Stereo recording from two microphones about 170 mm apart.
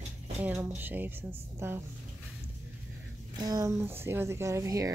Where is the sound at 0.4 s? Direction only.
10° right (ahead or behind).